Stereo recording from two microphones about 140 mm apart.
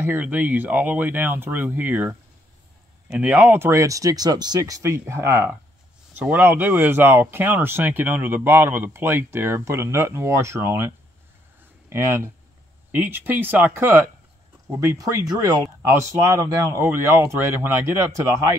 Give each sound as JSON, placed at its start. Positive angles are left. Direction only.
{"t": 0.0, "sound": "a man's voice", "side_deg": -15}
{"t": 11.9, "sound": "a man's voice", "side_deg": -20}